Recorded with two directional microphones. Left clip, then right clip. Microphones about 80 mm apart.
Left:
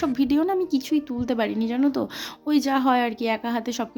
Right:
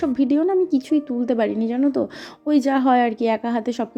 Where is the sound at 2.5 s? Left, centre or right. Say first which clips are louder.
Right 3 dB; right.